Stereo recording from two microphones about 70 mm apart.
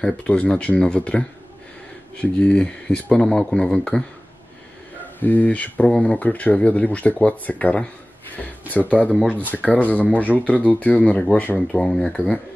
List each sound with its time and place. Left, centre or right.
0.0 s speech: centre
5.2 s speech: left
9.1 s speech: centre
9.4 s speech: left
10.3 s speech: centre
10.7 s speech: left
11.7 s speech: centre